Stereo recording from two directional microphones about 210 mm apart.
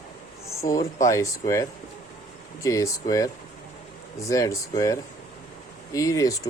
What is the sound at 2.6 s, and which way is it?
Speech, 15° left (ahead or behind).